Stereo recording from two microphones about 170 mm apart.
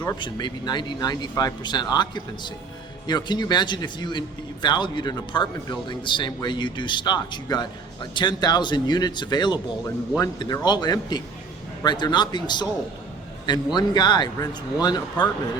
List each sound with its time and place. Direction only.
0.0 s speech: 25° left (ahead or behind)
13.7 s speech: 25° left (ahead or behind)